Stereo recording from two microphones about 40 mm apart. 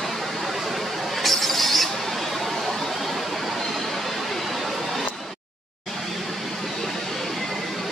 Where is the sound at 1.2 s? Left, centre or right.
Centre.